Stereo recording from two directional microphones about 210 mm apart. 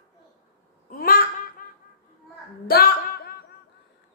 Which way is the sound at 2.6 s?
45° left (ahead or behind).